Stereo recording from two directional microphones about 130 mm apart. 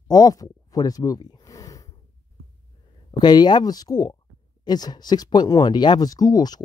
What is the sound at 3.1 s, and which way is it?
Speech, 35° left (ahead or behind).